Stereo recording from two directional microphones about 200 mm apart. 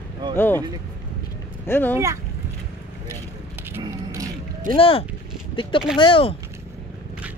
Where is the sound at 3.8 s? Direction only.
15° right (ahead or behind).